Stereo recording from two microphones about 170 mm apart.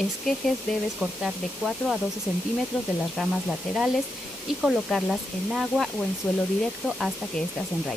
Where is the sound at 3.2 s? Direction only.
5° right (ahead or behind).